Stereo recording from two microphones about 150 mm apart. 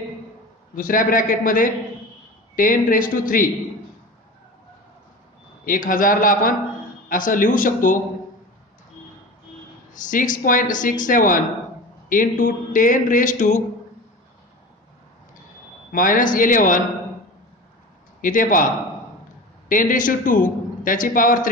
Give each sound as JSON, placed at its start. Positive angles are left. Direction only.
{"t": 0.7, "sound": "speech", "side_deg": 70}
{"t": 5.7, "sound": "a man's voice", "side_deg": 65}
{"t": 9.9, "sound": "a man's voice", "side_deg": 60}
{"t": 15.9, "sound": "a man's voice", "side_deg": 65}
{"t": 18.2, "sound": "a man's voice", "side_deg": 65}
{"t": 19.7, "sound": "a man's voice", "side_deg": 65}